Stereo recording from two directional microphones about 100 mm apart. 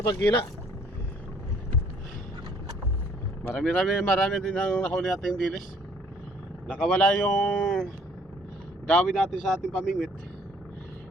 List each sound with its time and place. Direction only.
0.0 s speech: 35° left (ahead or behind)
3.4 s speech: 10° left (ahead or behind)
6.7 s speech: 5° left (ahead or behind)
8.9 s speech: 5° left (ahead or behind)